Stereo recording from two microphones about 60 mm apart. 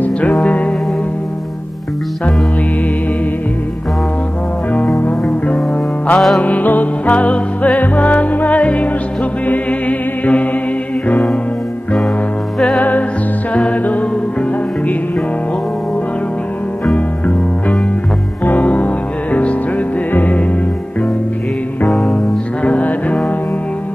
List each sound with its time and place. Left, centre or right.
0.0 s music: left
4.9 s music: left
6.1 s music: centre
6.4 s music: left
12.7 s music: left
16.9 s music: left
20.1 s music: left
21.8 s music: centre
22.6 s music: left